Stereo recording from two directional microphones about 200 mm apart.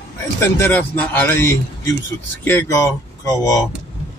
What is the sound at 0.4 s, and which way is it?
Speech, 10° left (ahead or behind).